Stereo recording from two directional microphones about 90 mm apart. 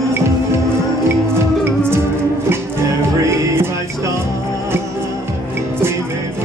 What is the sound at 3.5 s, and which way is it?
Music, 25° right (ahead or behind).